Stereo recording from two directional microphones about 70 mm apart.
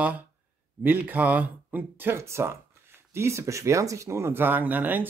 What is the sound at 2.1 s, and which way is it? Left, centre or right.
Speech, right.